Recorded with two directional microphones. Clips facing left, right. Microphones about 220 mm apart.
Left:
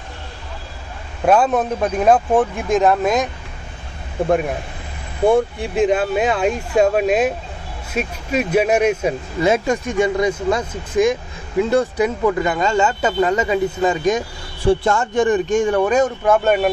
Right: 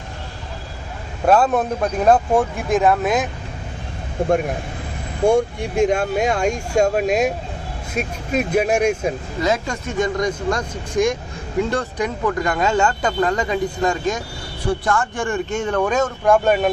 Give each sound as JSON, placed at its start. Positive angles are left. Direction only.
{"t": 1.2, "sound": "speech", "side_deg": 5}
{"t": 5.2, "sound": "speech", "side_deg": 0}
{"t": 9.4, "sound": "a man's voice", "side_deg": 20}
{"t": 14.8, "sound": "a man's voice", "side_deg": 25}